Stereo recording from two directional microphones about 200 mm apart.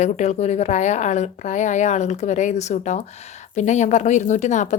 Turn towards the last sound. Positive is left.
turn(degrees=35)  # may be behind; listen again after turning